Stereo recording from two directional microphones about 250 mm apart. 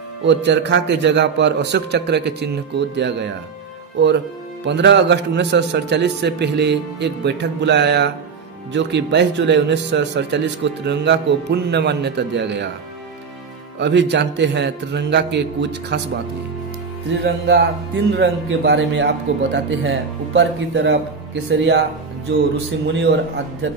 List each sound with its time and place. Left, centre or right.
0.2 s speech: right
4.6 s speech: right
13.7 s speech: right
17.2 s speech: right
22.9 s speech: right